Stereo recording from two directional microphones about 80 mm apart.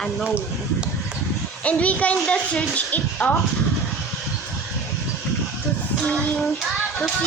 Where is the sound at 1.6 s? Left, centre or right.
Centre.